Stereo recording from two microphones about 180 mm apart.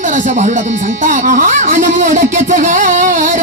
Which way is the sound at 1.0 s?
50° right (ahead or behind).